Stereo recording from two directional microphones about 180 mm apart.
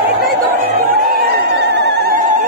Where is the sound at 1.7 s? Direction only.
70° right (ahead or behind).